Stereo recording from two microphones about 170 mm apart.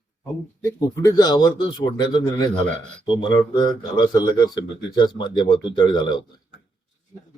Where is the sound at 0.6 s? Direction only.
20° left (ahead or behind).